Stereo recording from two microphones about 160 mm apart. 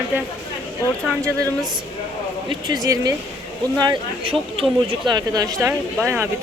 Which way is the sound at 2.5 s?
25° right (ahead or behind).